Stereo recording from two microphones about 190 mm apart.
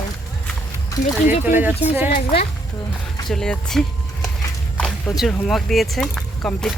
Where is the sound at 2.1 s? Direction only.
40° left (ahead or behind).